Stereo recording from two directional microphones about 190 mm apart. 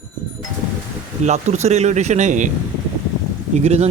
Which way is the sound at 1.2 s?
35° right (ahead or behind).